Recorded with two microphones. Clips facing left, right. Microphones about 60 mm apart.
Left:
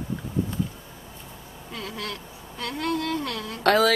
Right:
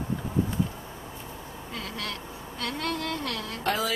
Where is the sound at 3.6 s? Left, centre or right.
Left.